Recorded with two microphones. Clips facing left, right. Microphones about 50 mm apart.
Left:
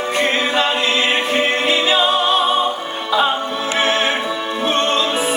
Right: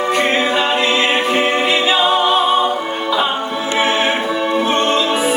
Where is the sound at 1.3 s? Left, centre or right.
Centre.